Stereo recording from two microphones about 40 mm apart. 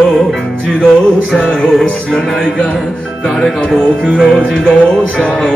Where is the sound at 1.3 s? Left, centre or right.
Left.